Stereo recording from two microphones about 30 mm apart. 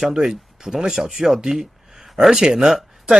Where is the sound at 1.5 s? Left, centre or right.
Centre.